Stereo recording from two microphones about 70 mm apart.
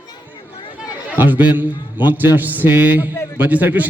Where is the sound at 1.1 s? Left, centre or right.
Right.